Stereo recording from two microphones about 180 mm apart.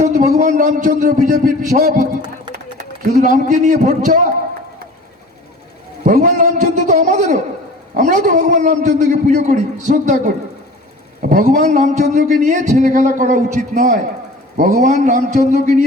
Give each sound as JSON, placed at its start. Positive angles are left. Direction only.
{"t": 0.0, "sound": "a man's voice", "side_deg": -40}
{"t": 6.1, "sound": "a sound", "side_deg": -45}
{"t": 7.9, "sound": "a man's voice", "side_deg": -45}